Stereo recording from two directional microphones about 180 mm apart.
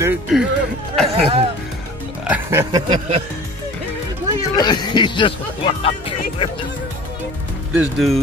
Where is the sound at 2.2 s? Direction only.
15° right (ahead or behind).